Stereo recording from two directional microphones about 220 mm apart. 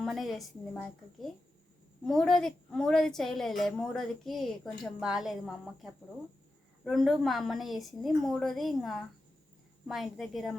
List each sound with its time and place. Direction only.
0.0 s a woman's voice: centre (ahead or behind)